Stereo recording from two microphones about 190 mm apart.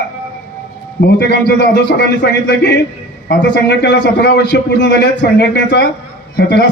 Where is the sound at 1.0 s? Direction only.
60° left (ahead or behind).